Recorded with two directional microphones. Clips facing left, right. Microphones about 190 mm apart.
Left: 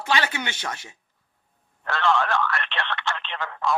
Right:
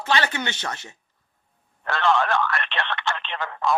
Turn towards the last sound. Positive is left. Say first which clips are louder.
# right 2 dB
turn(degrees=-20)  # may be behind; listen again after turning